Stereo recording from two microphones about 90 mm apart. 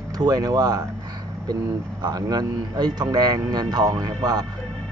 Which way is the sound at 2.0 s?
50° right (ahead or behind).